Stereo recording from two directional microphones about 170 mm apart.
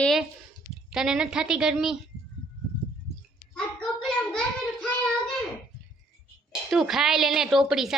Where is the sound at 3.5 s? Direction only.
5° left (ahead or behind).